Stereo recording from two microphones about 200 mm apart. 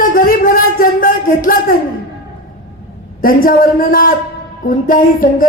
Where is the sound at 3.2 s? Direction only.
45° left (ahead or behind).